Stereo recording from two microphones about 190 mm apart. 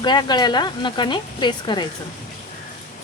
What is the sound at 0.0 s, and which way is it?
Speech, 20° left (ahead or behind).